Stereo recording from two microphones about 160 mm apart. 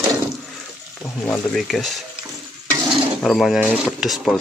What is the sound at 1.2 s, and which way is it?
Speech, 5° left (ahead or behind).